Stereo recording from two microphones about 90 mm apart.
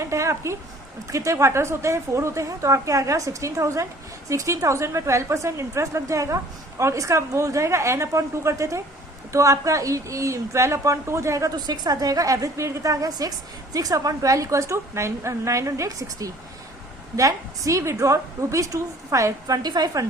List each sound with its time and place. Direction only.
0.0 s a sound: 35° right (ahead or behind)
1.1 s a woman's voice: 35° right (ahead or behind)
11.5 s a woman's voice: 50° right (ahead or behind)